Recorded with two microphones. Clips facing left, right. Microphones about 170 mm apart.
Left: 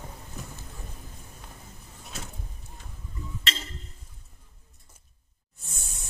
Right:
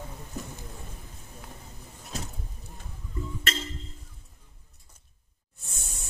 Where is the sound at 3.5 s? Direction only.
50° right (ahead or behind).